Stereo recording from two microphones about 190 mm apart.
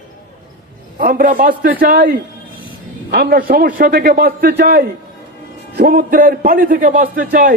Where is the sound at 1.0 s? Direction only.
50° right (ahead or behind).